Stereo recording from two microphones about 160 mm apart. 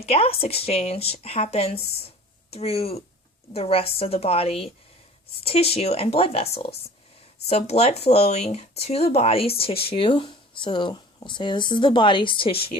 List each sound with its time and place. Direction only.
0.0 s speech: 40° left (ahead or behind)